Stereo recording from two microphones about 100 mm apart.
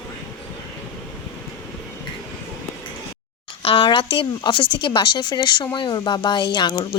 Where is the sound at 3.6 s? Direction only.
70° left (ahead or behind).